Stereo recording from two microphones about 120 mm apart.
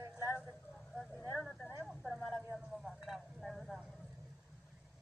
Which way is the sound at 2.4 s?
15° right (ahead or behind).